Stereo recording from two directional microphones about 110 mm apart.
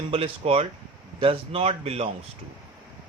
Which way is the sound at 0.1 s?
60° right (ahead or behind).